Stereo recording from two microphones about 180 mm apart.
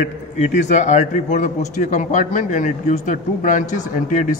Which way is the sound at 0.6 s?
45° left (ahead or behind).